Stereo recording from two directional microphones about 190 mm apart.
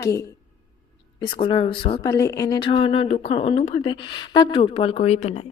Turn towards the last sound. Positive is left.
turn(degrees=35)  # may be behind; listen again after turning